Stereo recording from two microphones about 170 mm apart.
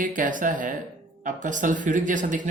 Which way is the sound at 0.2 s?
50° right (ahead or behind).